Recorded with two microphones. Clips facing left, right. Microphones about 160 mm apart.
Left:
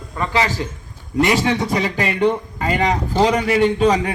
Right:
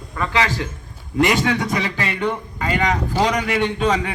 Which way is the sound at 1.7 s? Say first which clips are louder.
Left 3 dB; 40° left (ahead or behind).